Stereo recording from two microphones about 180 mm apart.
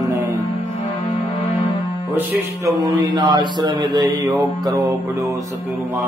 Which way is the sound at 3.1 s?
25° right (ahead or behind).